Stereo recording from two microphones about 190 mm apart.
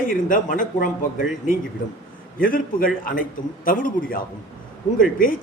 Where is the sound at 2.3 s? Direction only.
45° left (ahead or behind).